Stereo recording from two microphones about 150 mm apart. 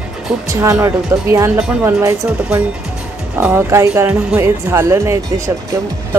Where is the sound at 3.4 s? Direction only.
15° right (ahead or behind).